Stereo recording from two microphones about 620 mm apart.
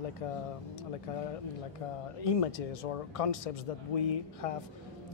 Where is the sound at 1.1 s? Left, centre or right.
Left.